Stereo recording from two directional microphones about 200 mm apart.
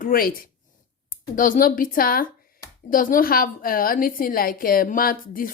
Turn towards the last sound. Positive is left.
turn(degrees=45)  # may be behind; listen again after turning